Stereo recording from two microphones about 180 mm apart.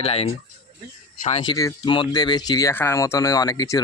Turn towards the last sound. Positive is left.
turn(degrees=20)  # may be behind; listen again after turning